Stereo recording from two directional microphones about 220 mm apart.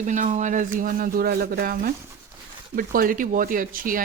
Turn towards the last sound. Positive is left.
turn(degrees=-40)  # may be behind; listen again after turning